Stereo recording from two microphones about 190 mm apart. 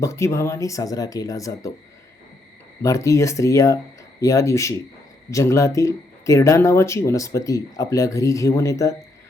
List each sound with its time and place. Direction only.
0.0 s speech: 15° left (ahead or behind)
2.8 s speech: 15° left (ahead or behind)